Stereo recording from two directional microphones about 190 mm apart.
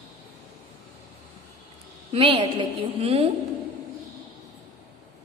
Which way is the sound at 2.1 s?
30° right (ahead or behind).